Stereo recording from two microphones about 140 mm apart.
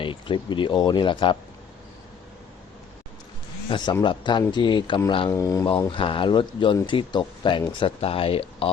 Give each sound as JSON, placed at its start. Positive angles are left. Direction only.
{"t": 0.0, "sound": "speech", "side_deg": 35}
{"t": 3.7, "sound": "speech", "side_deg": 30}
{"t": 5.3, "sound": "speech", "side_deg": 20}
{"t": 5.9, "sound": "speech", "side_deg": 35}